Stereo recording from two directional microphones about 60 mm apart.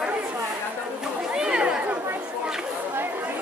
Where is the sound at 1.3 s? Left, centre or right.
Centre.